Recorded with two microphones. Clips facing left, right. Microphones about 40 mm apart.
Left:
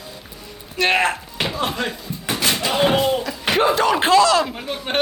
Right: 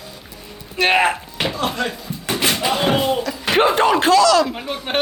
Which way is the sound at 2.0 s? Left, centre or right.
Centre.